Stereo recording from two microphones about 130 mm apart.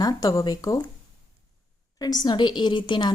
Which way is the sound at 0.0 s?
30° left (ahead or behind).